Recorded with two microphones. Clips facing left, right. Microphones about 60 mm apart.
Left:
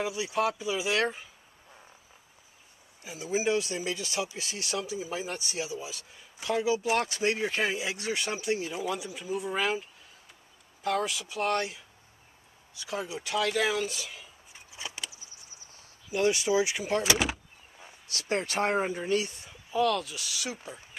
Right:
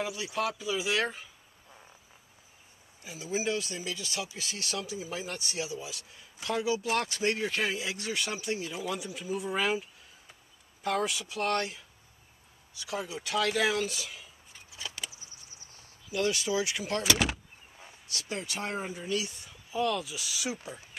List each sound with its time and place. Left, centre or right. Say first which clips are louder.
0.0 s speech: left 3 dB; centre
3.2 s a man's voice: left 4 dB; left
13.0 s speech: even; centre
15.0 s a sound: left 1 dB; centre
16.1 s a man's voice: left 4 dB; centre
17.2 s vehicle: even; centre
18.0 s speech: left 6 dB; left
19.7 s speech: left 3 dB; centre